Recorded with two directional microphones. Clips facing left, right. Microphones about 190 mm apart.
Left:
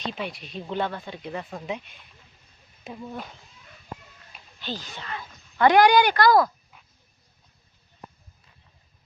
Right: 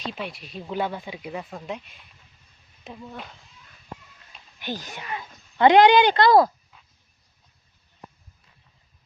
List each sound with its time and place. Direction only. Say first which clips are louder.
0.0 s speech: left 1 dB; centre (ahead or behind)
4.6 s speech: right 2 dB; 15° right (ahead or behind)